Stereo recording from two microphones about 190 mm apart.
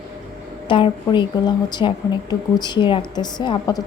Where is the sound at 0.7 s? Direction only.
25° left (ahead or behind).